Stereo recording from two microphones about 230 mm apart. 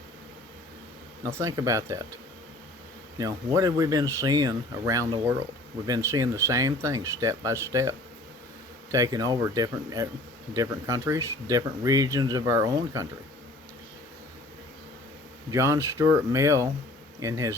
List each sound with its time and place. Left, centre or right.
1.2 s speech: centre
3.2 s speech: centre
15.4 s speech: centre